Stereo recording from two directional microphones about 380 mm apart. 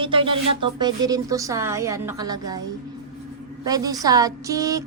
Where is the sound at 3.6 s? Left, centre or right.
Centre.